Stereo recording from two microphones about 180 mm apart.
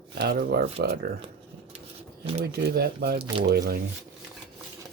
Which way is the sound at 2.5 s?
60° right (ahead or behind).